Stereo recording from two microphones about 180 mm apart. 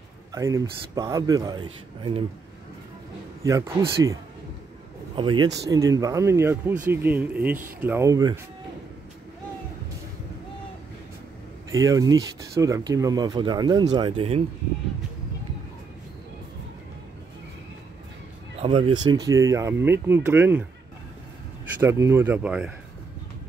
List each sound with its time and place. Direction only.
0.3 s speech: 15° right (ahead or behind)
3.4 s speech: 15° right (ahead or behind)
11.7 s speech: 20° right (ahead or behind)
18.6 s speech: 30° right (ahead or behind); by 20.6 s 10° right (ahead or behind)
21.8 s speech: 15° right (ahead or behind)